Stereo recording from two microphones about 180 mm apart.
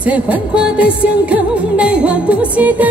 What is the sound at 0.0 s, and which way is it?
Music, 5° right (ahead or behind).